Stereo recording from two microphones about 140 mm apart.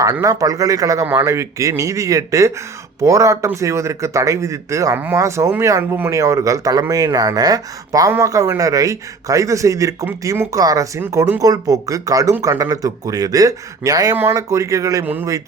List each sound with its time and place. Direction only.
0.0 s a man's voice: 20° right (ahead or behind)